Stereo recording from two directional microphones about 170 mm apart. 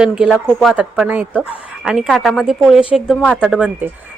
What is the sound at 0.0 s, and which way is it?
Speech, 5° right (ahead or behind).